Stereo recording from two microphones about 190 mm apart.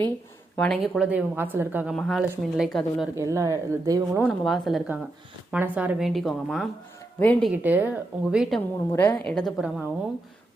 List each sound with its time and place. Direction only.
0.5 s speech: 5° left (ahead or behind)
3.2 s speech: 15° right (ahead or behind)
4.2 s speech: centre (ahead or behind)
7.5 s speech: 10° right (ahead or behind)
8.9 s speech: 10° left (ahead or behind)